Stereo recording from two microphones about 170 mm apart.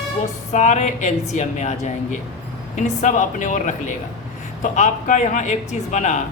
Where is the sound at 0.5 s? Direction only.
45° left (ahead or behind).